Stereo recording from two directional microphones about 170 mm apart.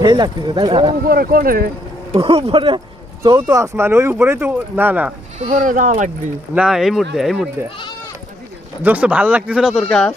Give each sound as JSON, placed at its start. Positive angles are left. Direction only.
{"t": 0.0, "sound": "speech", "side_deg": -25}
{"t": 1.0, "sound": "speech", "side_deg": -60}
{"t": 2.1, "sound": "speech", "side_deg": -35}
{"t": 5.5, "sound": "speech", "side_deg": -50}
{"t": 6.5, "sound": "speech", "side_deg": -5}
{"t": 8.8, "sound": "speech", "side_deg": -10}